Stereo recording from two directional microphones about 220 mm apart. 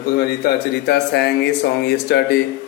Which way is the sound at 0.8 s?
45° left (ahead or behind).